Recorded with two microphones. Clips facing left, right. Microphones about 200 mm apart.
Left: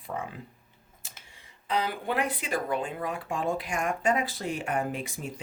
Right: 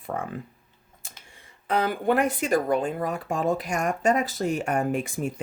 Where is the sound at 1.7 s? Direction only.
50° right (ahead or behind).